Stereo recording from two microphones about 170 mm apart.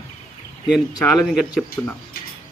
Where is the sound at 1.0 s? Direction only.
5° left (ahead or behind).